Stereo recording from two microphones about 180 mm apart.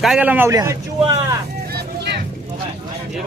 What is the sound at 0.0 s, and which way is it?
A man's voice, 5° right (ahead or behind).